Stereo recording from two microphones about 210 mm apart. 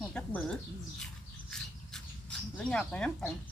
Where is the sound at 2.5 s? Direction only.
5° left (ahead or behind).